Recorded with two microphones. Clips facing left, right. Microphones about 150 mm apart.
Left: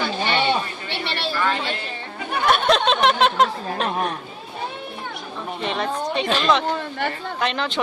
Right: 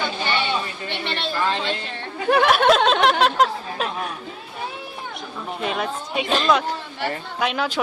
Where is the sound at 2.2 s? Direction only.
90° right.